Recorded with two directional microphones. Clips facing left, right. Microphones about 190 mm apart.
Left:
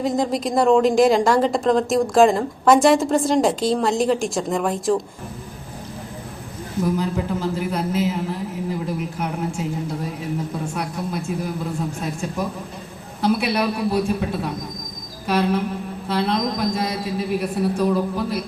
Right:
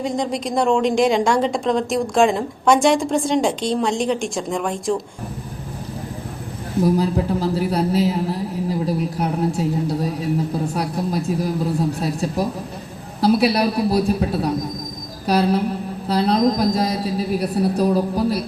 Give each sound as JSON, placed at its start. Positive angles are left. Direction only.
{"t": 0.0, "sound": "a woman's voice", "side_deg": 0}
{"t": 6.8, "sound": "speech", "side_deg": -35}